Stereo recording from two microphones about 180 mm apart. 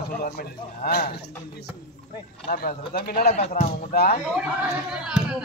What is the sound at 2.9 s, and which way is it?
Speech, 55° left (ahead or behind).